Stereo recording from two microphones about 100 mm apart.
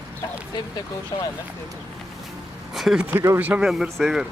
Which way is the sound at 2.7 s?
5° right (ahead or behind).